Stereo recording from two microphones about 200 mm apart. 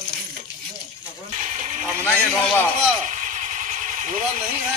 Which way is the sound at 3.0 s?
40° right (ahead or behind).